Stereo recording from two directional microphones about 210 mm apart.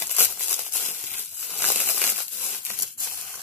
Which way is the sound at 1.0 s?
35° right (ahead or behind).